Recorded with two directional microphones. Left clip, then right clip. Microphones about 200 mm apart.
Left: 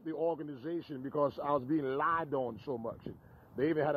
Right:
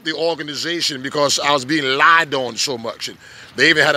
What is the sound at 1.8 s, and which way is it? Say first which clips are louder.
Speech: right 19 dB; 10° right (ahead or behind).